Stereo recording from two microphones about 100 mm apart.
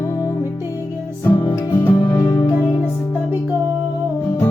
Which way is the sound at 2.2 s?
40° left (ahead or behind).